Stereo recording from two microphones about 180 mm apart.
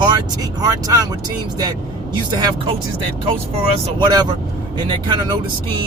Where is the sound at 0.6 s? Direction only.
20° right (ahead or behind).